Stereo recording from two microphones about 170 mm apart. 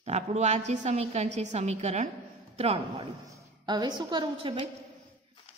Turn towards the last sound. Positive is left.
turn(degrees=-25)  # may be behind; listen again after turning